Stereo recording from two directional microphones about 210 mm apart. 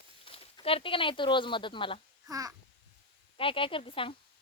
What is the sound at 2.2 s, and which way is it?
Babbling, 15° right (ahead or behind).